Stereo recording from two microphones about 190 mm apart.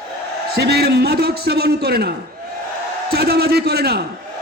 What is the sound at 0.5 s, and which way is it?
A man's voice, 60° right (ahead or behind).